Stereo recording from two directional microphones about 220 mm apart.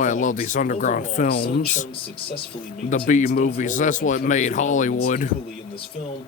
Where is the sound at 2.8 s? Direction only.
35° left (ahead or behind).